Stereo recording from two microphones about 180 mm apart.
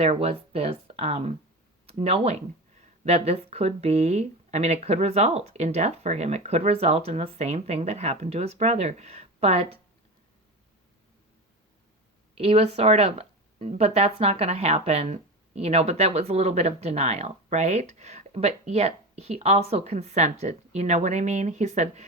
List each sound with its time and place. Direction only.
0.0 s speech: 35° right (ahead or behind)
12.4 s speech: 35° right (ahead or behind)